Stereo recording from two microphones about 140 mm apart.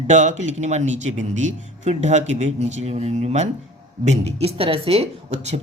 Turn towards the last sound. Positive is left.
turn(degrees=-50)  # may be behind; listen again after turning